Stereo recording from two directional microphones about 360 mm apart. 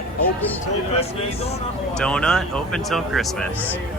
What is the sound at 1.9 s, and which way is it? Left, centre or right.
Speech, centre.